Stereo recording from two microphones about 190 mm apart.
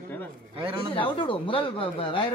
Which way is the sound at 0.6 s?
25° right (ahead or behind).